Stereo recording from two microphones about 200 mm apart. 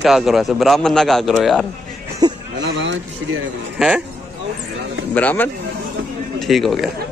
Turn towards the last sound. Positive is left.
turn(degrees=0)  # may be behind; listen again after turning